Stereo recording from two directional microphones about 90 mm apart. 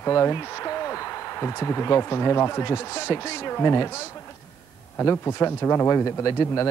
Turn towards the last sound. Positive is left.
turn(degrees=30)  # may be behind; listen again after turning